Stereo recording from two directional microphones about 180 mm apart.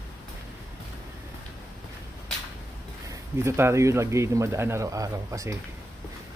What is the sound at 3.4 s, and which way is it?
Speech, 15° right (ahead or behind).